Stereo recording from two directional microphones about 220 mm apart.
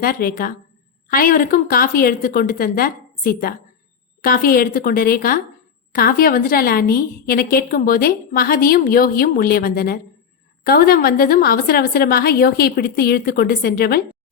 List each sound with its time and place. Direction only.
0.0 s a woman's voice: 40° left (ahead or behind)